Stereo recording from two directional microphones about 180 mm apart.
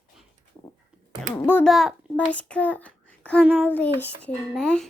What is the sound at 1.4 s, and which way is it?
A child's voice, 10° left (ahead or behind).